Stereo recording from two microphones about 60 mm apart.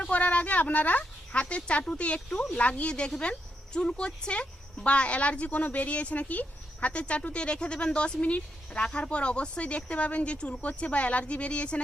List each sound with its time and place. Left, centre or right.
0.0 s speech: left